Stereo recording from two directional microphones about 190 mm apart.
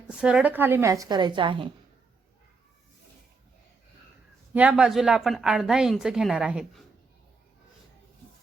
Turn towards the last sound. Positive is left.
turn(degrees=-5)  # may be behind; listen again after turning